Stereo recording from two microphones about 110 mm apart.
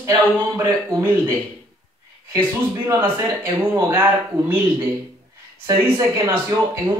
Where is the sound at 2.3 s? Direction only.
30° right (ahead or behind).